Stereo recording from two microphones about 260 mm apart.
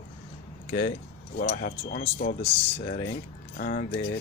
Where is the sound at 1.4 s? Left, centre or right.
Left.